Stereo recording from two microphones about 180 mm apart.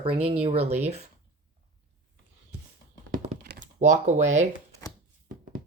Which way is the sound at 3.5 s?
40° right (ahead or behind).